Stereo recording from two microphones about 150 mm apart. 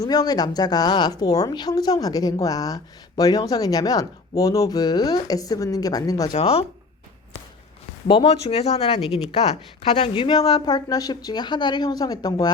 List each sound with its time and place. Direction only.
0.0 s speech: 25° left (ahead or behind)
6.3 s speech: 40° left (ahead or behind)
8.0 s speech: 35° left (ahead or behind)